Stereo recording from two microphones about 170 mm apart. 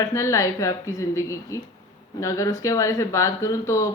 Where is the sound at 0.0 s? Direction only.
20° left (ahead or behind).